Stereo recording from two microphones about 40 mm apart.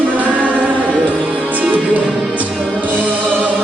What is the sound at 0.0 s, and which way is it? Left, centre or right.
Music, right.